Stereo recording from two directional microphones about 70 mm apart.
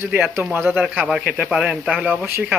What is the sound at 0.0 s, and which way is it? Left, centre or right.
Speech, right.